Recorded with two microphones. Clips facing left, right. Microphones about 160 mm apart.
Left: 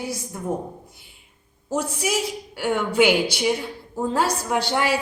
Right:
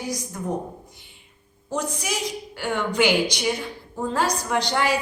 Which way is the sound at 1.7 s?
5° left (ahead or behind).